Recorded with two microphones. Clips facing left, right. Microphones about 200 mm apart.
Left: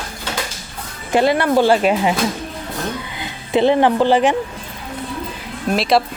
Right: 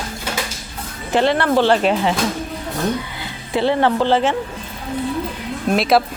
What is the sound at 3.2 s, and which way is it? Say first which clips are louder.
Speech: left 8 dB; 20° left (ahead or behind).